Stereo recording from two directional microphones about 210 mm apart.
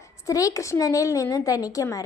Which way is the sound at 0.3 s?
15° left (ahead or behind).